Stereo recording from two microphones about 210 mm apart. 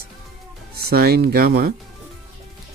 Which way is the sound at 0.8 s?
50° right (ahead or behind).